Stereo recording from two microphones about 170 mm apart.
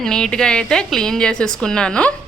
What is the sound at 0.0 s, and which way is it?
A woman's voice, 5° left (ahead or behind).